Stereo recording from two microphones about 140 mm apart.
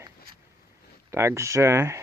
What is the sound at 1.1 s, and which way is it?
Speech, 20° right (ahead or behind).